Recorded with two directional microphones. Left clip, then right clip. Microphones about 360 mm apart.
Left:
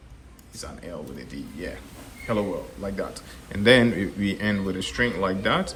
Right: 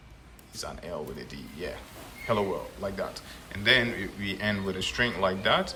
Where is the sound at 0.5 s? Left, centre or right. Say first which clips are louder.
Right 1 dB; centre.